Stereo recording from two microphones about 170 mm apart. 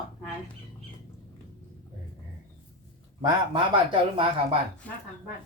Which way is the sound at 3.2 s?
30° right (ahead or behind).